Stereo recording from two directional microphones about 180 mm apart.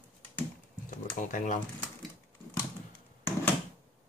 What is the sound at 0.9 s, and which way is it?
Typing, 45° left (ahead or behind).